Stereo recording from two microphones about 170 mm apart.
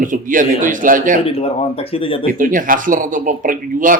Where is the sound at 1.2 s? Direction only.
35° left (ahead or behind).